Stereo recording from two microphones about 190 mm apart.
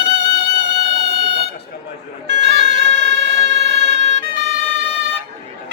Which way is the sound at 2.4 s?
70° right (ahead or behind).